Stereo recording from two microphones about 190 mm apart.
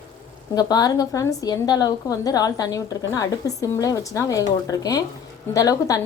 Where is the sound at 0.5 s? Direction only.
20° left (ahead or behind).